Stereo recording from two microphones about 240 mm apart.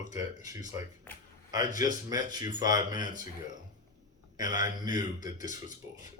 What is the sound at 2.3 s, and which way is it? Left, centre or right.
Speech, centre.